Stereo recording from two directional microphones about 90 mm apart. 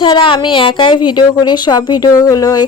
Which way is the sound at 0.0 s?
65° left (ahead or behind).